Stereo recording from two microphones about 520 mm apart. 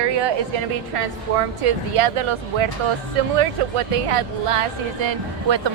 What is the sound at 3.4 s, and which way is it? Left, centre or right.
Speech, right.